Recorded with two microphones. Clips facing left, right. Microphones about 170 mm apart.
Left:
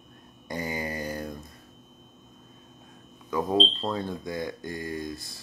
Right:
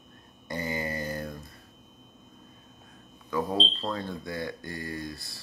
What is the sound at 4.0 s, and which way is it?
Speech, 15° left (ahead or behind).